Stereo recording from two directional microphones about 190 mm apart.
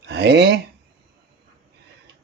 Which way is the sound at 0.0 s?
60° right (ahead or behind).